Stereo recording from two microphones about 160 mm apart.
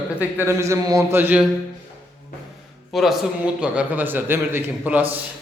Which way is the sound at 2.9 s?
Centre (ahead or behind).